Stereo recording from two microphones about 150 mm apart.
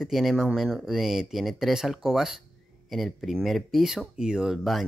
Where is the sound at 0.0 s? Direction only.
Centre (ahead or behind).